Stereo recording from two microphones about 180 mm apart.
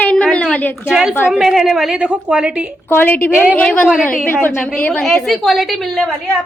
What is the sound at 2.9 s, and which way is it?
A woman's voice, 10° left (ahead or behind).